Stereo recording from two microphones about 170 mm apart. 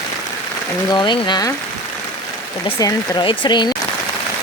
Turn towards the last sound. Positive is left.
turn(degrees=25)  # may be behind; listen again after turning